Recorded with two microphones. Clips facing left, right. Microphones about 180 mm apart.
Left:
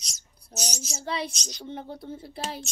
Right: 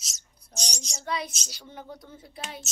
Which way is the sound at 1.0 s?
30° left (ahead or behind).